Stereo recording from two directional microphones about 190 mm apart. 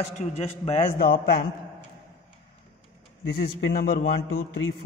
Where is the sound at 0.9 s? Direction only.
50° left (ahead or behind).